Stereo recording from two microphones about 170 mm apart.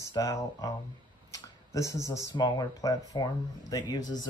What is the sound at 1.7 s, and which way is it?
Speech, 20° left (ahead or behind).